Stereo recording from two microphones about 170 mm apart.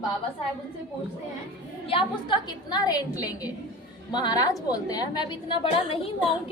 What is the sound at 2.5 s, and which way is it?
A woman's voice, 25° left (ahead or behind).